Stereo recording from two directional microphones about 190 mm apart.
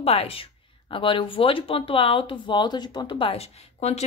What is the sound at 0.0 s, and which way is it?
Speech, 30° left (ahead or behind).